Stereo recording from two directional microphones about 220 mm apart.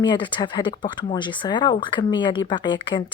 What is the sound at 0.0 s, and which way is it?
Speech, 20° left (ahead or behind).